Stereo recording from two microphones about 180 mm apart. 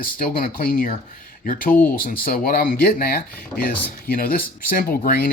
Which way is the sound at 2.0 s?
55° left (ahead or behind).